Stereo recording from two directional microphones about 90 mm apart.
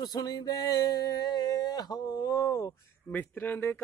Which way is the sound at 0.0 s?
45° left (ahead or behind).